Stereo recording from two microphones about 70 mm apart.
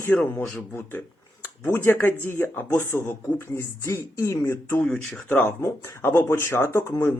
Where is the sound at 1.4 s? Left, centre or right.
Left.